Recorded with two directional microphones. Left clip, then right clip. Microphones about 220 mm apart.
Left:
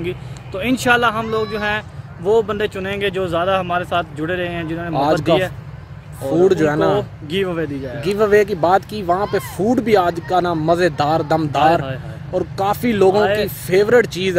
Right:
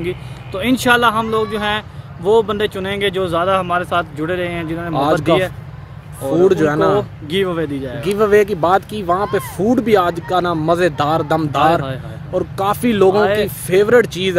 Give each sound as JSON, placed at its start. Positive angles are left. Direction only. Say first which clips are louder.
{"t": 0.0, "sound": "speech", "louder": "right 2 dB", "side_deg": -15}
{"t": 4.9, "sound": "speech", "louder": "right 1 dB", "side_deg": 0}
{"t": 5.2, "sound": "speech", "louder": "right 1 dB", "side_deg": -15}
{"t": 6.3, "sound": "speech", "louder": "right 1 dB", "side_deg": 0}
{"t": 7.0, "sound": "speech", "louder": "right 3 dB", "side_deg": -20}
{"t": 8.0, "sound": "speech", "louder": "right 1 dB", "side_deg": 0}
{"t": 13.2, "sound": "speech", "louder": "right 2 dB", "side_deg": -15}
{"t": 13.7, "sound": "speech", "louder": "right 1 dB", "side_deg": 0}